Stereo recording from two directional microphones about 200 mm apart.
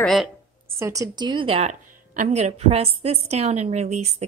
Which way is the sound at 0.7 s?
15° right (ahead or behind).